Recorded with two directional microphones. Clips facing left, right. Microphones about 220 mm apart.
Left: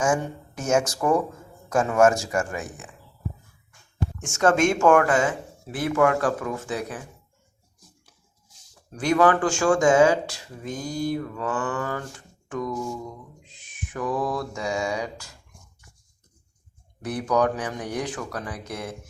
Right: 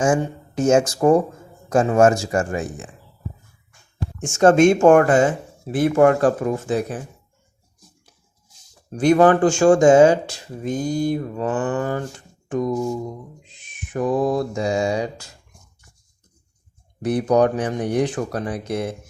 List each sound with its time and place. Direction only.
0.0 s speech: 30° right (ahead or behind)
4.2 s speech: 30° right (ahead or behind)
9.0 s speech: 25° right (ahead or behind)
17.0 s speech: 25° right (ahead or behind)